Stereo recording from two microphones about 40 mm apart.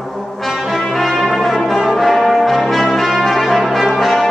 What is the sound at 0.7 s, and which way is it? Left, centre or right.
Brass instrument, centre.